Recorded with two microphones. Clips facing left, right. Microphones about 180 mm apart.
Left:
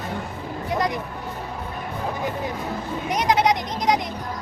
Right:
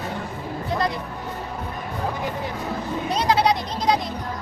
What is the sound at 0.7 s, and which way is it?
Music, 15° left (ahead or behind).